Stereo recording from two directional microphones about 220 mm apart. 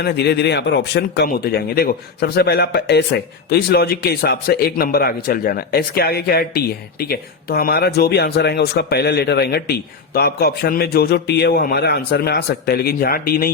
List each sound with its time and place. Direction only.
0.0 s speech: 45° left (ahead or behind)